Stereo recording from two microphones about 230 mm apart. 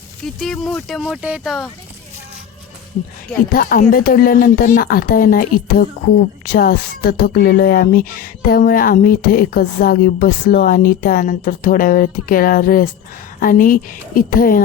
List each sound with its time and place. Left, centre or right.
0.2 s speech: centre
3.5 s speech: left